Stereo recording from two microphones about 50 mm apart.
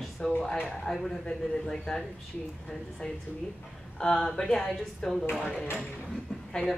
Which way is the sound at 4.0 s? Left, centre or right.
Centre.